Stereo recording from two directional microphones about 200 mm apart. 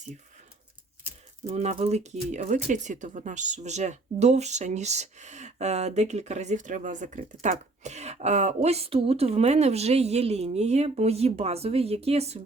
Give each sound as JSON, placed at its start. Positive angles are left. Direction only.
{"t": 1.5, "sound": "speech", "side_deg": -30}